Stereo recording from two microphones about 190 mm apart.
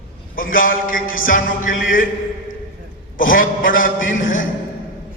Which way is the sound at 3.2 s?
45° left (ahead or behind).